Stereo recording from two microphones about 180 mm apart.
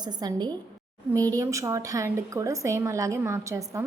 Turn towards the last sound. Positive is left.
turn(degrees=-15)  # may be behind; listen again after turning